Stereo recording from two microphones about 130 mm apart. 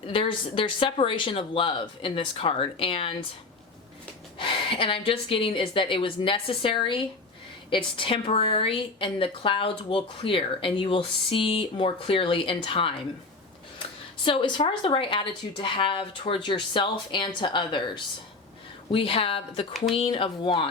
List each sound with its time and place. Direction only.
0.1 s a woman's voice: 40° left (ahead or behind)
4.4 s a woman's voice: 40° left (ahead or behind)
14.3 s a woman's voice: 40° left (ahead or behind)
19.7 s speech: centre (ahead or behind)
20.0 s speech: 45° left (ahead or behind)